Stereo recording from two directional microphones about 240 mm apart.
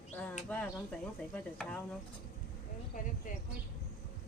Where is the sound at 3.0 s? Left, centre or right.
Left.